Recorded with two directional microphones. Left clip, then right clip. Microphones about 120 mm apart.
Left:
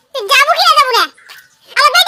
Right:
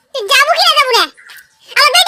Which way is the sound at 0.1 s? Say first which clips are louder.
Even; 25° right (ahead or behind).